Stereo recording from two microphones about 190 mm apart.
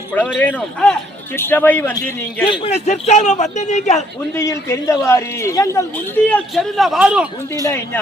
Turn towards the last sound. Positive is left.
turn(degrees=15)  # may be behind; listen again after turning